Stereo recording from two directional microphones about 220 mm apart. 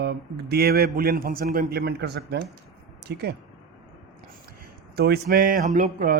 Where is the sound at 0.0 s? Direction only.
45° right (ahead or behind).